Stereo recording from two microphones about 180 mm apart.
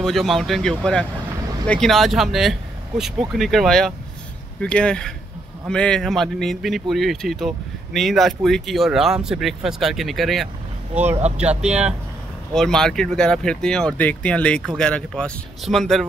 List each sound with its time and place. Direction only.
0.0 s speech: centre (ahead or behind)
11.1 s speech: 35° right (ahead or behind)
12.5 s speech: 5° left (ahead or behind)